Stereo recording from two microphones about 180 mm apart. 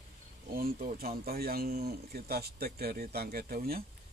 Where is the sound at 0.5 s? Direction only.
55° right (ahead or behind).